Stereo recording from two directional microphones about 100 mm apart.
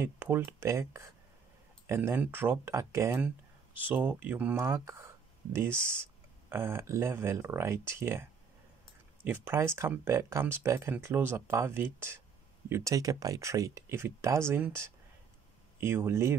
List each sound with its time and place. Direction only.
0.0 s speech: 20° right (ahead or behind)
3.2 s speech: 15° right (ahead or behind)
4.6 s speech: 30° right (ahead or behind)
15.8 s speech: 25° right (ahead or behind)